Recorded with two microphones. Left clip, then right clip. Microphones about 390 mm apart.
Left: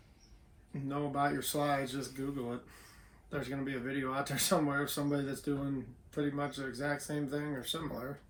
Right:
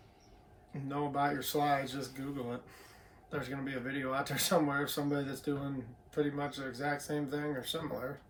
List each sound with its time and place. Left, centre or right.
0.9 s speech: centre